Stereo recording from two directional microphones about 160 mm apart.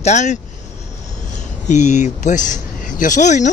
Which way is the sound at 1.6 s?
50° left (ahead or behind).